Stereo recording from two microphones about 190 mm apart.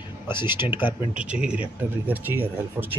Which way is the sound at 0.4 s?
10° right (ahead or behind).